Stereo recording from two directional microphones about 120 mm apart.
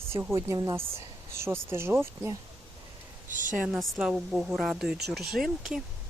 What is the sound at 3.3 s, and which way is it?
Speech, 90° right.